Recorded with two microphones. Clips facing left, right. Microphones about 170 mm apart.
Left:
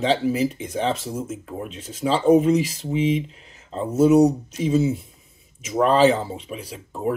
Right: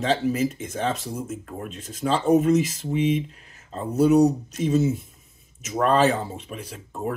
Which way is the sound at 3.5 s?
20° left (ahead or behind).